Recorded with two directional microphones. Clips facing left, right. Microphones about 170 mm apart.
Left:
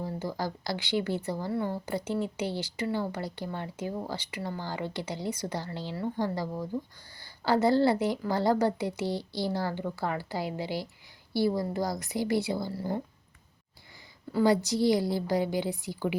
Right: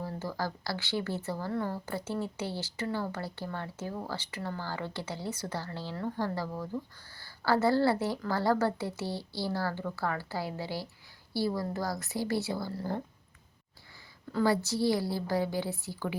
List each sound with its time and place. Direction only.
0.0 s a woman's voice: 15° left (ahead or behind)
14.3 s a woman's voice: 15° left (ahead or behind)